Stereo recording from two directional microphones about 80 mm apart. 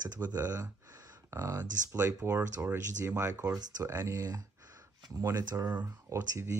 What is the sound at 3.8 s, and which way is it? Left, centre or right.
Speech, right.